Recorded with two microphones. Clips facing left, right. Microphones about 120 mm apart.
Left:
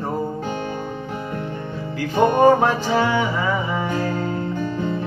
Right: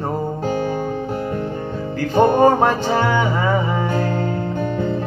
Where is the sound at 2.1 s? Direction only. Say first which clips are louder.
Right 2 dB; 40° right (ahead or behind).